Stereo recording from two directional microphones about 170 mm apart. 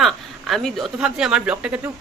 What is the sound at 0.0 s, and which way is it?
A woman's voice, centre (ahead or behind).